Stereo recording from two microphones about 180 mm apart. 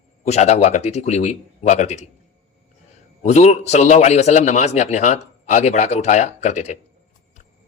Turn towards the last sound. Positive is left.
turn(degrees=40)  # may be behind; listen again after turning